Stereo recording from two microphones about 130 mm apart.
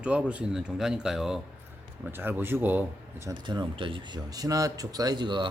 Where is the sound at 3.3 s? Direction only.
35° right (ahead or behind).